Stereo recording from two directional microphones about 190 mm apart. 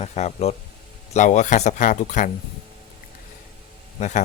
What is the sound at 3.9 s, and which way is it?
Speech, 40° left (ahead or behind).